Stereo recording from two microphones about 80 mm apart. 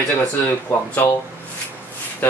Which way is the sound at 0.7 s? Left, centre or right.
Left.